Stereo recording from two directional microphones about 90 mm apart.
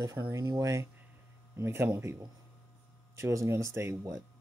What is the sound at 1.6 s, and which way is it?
Speech, 30° right (ahead or behind).